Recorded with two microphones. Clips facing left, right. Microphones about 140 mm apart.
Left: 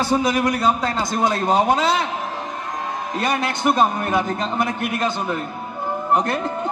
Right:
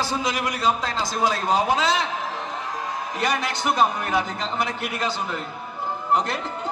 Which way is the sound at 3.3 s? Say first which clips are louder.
Left 4 dB; 55° left (ahead or behind).